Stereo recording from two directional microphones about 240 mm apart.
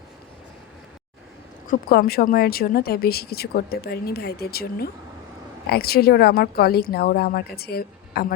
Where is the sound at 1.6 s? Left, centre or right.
Left.